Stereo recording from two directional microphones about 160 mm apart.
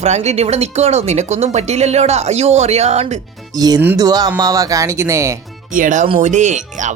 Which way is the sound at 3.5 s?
25° right (ahead or behind).